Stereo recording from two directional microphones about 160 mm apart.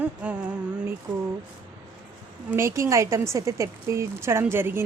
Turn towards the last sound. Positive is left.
turn(degrees=-15)  # may be behind; listen again after turning